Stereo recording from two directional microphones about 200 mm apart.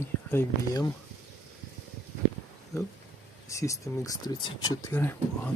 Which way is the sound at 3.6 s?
15° left (ahead or behind).